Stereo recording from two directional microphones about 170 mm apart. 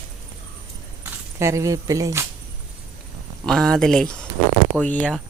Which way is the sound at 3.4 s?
5° left (ahead or behind).